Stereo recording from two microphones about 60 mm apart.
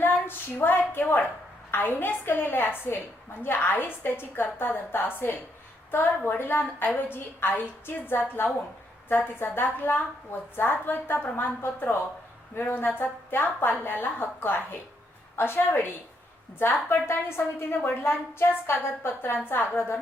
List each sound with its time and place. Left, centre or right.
0.0 s a woman's voice: left